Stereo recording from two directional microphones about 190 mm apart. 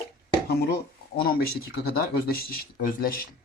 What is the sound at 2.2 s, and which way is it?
Speech, 50° left (ahead or behind).